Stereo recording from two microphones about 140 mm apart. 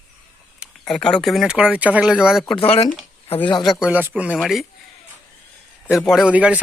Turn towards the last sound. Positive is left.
turn(degrees=-10)  # may be behind; listen again after turning